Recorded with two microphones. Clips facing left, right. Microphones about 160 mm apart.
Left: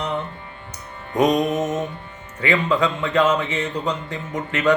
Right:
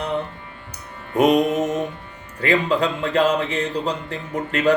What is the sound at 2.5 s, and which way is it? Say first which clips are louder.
Music: right 1 dB; 35° right (ahead or behind).